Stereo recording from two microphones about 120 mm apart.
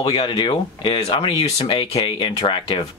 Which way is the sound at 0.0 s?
45° left (ahead or behind).